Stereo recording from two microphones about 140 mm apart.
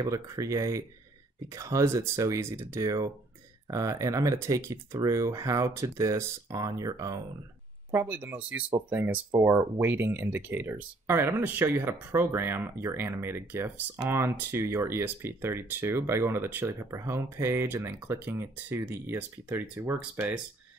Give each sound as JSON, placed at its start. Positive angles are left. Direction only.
{"t": 0.0, "sound": "speech", "side_deg": -25}
{"t": 7.9, "sound": "speech", "side_deg": -15}